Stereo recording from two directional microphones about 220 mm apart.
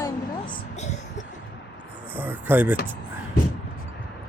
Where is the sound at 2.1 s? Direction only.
10° right (ahead or behind).